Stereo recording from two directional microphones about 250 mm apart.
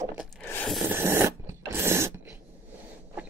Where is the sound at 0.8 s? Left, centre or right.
Centre.